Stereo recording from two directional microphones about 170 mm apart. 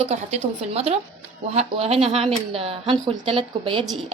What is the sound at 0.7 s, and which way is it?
Speech, 35° right (ahead or behind).